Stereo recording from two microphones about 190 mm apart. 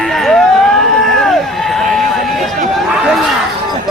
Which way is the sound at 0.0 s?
Centre (ahead or behind).